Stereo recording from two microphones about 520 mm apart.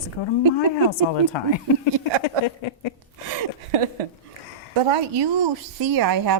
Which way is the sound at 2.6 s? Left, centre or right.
Left.